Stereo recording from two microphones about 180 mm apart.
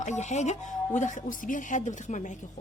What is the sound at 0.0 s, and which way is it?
Speech, 40° left (ahead or behind).